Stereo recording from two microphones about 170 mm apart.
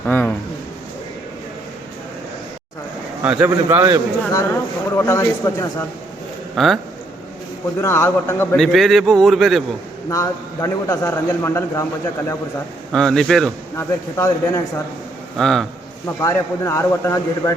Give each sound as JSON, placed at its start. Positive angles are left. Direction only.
{"t": 0.0, "sound": "a man's voice", "side_deg": 10}
{"t": 3.2, "sound": "a man's voice", "side_deg": -10}
{"t": 4.3, "sound": "a man's voice", "side_deg": 15}
{"t": 6.6, "sound": "a man's voice", "side_deg": 0}
{"t": 7.8, "sound": "a man's voice", "side_deg": 15}
{"t": 8.5, "sound": "a man's voice", "side_deg": 0}
{"t": 10.1, "sound": "a man's voice", "side_deg": 20}
{"t": 12.9, "sound": "a man's voice", "side_deg": 5}
{"t": 13.7, "sound": "a man's voice", "side_deg": 15}
{"t": 15.4, "sound": "a man's voice", "side_deg": 0}
{"t": 16.2, "sound": "a man's voice", "side_deg": 15}